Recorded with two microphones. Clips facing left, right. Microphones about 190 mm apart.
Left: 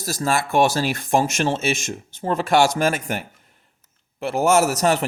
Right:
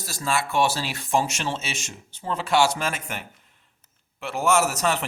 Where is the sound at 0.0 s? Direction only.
40° left (ahead or behind).